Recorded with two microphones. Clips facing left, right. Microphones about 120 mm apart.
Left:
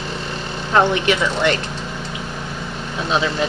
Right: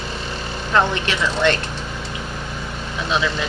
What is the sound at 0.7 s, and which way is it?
Speech, 15° left (ahead or behind).